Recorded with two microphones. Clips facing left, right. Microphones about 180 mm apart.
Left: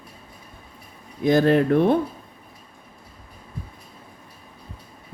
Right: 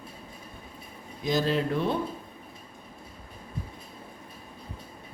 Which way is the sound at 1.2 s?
60° left (ahead or behind).